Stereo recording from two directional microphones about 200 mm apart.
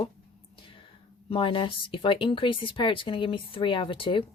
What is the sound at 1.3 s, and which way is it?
Speech, 25° left (ahead or behind).